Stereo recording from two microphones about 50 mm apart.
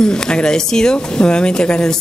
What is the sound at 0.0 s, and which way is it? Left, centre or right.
A woman's voice, centre.